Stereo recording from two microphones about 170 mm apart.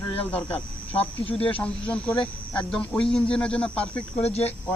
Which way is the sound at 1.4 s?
5° left (ahead or behind).